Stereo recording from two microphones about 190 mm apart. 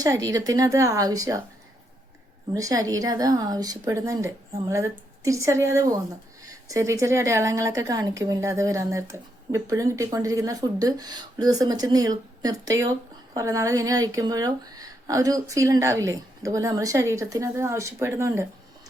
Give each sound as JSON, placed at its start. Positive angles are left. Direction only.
{"t": 0.0, "sound": "a woman's voice", "side_deg": -20}
{"t": 2.6, "sound": "a woman's voice", "side_deg": -20}